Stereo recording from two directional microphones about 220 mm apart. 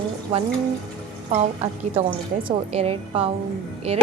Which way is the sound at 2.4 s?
25° right (ahead or behind).